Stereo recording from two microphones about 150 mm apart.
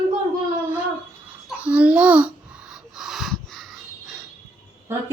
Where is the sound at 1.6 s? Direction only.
10° right (ahead or behind).